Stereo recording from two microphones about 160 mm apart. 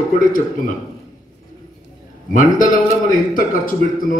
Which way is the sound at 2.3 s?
55° left (ahead or behind).